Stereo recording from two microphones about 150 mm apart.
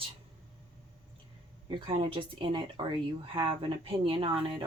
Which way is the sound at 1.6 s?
35° right (ahead or behind).